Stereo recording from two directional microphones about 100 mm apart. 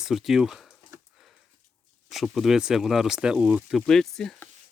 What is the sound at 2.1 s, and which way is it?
Speech, centre (ahead or behind).